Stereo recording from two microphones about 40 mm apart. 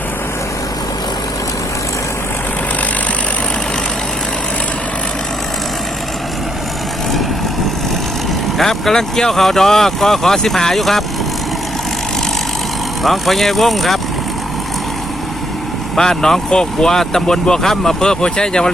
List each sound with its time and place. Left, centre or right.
8.5 s speech: centre
13.0 s speech: centre
16.0 s speech: centre